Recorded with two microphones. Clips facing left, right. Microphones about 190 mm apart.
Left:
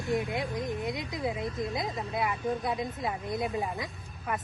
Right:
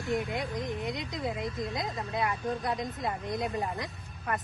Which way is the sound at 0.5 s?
5° left (ahead or behind).